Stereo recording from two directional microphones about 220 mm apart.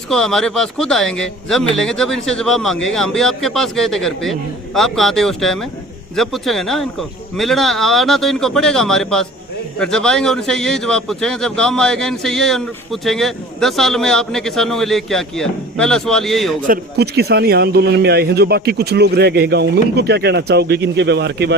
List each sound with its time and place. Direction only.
0.1 s a man's voice: centre (ahead or behind)
16.6 s a man's voice: 45° right (ahead or behind)